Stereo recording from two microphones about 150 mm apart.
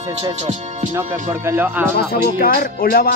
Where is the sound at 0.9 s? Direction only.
15° right (ahead or behind).